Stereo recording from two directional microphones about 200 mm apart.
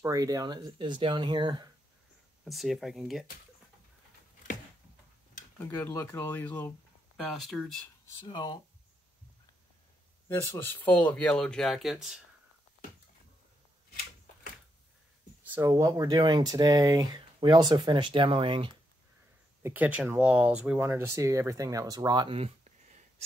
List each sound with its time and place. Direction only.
0.0 s speech: 15° right (ahead or behind)
2.4 s speech: centre (ahead or behind)
5.6 s speech: 10° left (ahead or behind)
8.3 s speech: 20° left (ahead or behind)
10.2 s speech: 15° left (ahead or behind)
15.4 s speech: 15° right (ahead or behind)
19.6 s speech: 10° right (ahead or behind); by 23.2 s 35° right (ahead or behind)